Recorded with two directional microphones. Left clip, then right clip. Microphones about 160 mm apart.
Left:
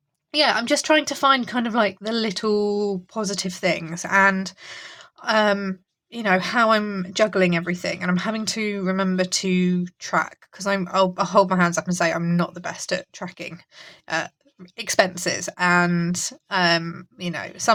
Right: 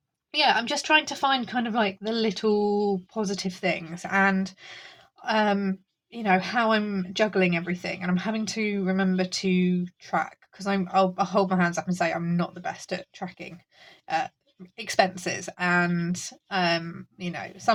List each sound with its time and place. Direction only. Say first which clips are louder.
0.3 s speech: left 3 dB; 55° left (ahead or behind)